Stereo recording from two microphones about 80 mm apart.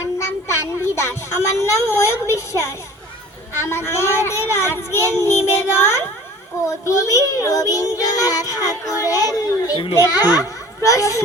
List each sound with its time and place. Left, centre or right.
0.0 s child singing: left
3.6 s a child's voice: left
6.7 s child singing: left
10.8 s speech: left